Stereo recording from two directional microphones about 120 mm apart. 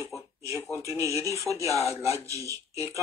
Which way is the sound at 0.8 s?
25° right (ahead or behind).